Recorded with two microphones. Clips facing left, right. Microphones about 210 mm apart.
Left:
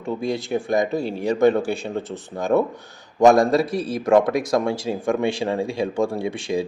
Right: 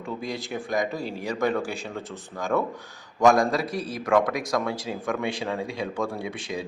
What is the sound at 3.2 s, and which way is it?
A man's voice, 25° left (ahead or behind).